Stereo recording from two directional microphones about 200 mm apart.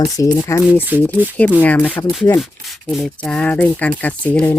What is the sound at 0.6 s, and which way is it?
Speech, 10° right (ahead or behind).